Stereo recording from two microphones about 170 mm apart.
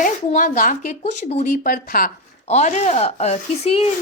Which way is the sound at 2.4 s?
45° left (ahead or behind).